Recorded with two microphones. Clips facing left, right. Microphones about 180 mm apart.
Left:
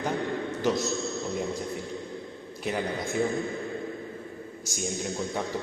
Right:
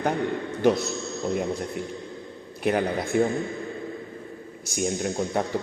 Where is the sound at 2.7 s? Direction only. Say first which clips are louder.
Right 6 dB; 65° right (ahead or behind).